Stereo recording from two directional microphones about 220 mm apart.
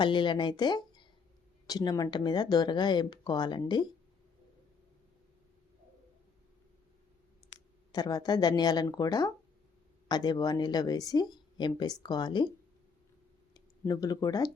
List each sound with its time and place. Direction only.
0.0 s speech: 20° left (ahead or behind)
7.9 s speech: 20° left (ahead or behind)